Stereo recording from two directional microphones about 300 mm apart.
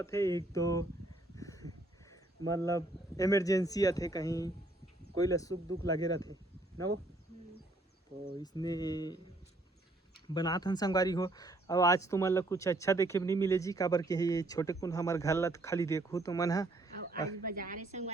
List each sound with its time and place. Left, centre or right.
0.0 s speech: centre
1.4 s a sound: centre
2.5 s speech: centre
8.4 s speech: centre
10.2 s speech: centre
17.4 s a woman's voice: right